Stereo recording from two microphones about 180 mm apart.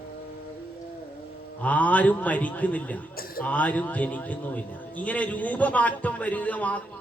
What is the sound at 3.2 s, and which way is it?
Speech, 55° left (ahead or behind).